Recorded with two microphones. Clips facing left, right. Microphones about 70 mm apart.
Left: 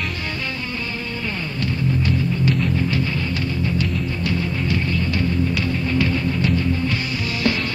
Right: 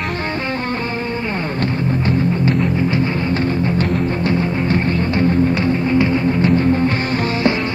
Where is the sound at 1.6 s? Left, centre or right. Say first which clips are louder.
Right 1 dB; right.